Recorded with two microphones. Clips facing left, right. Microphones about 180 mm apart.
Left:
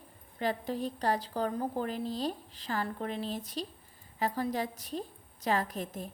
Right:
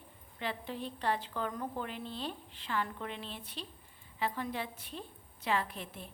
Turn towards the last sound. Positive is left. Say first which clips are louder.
# left 7 dB
turn(degrees=40)  # may be behind; listen again after turning